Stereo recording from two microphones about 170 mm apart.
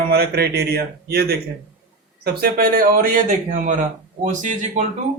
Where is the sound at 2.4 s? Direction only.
60° right (ahead or behind).